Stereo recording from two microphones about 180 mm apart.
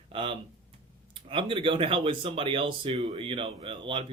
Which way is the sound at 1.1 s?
30° right (ahead or behind).